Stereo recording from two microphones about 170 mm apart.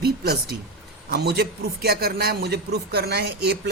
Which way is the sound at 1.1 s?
70° right (ahead or behind).